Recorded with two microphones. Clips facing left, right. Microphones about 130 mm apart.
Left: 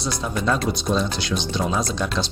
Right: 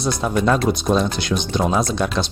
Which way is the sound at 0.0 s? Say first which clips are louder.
Right 5 dB; 60° right (ahead or behind).